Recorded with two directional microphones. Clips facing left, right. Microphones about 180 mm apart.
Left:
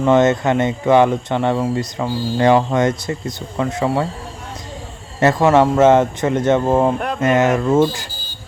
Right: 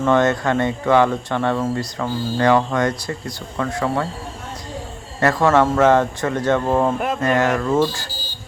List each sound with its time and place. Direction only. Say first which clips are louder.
0.0 s speech: left 3 dB; 20° left (ahead or behind)
5.2 s speech: left 3 dB; 20° left (ahead or behind)